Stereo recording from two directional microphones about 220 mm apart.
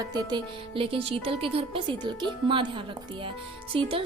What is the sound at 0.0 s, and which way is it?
A woman's voice, 20° right (ahead or behind).